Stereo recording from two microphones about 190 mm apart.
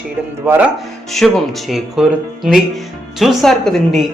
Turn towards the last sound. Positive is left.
turn(degrees=0)  # may be behind; listen again after turning